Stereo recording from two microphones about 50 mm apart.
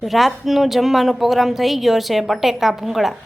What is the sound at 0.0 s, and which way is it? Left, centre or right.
A woman's voice, centre.